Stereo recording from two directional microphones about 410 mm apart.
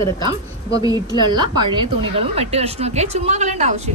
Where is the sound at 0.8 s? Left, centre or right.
Centre.